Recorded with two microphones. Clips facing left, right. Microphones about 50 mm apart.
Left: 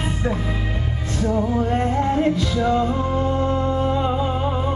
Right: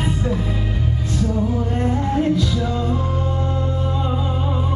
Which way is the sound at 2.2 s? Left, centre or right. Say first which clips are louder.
Even; left.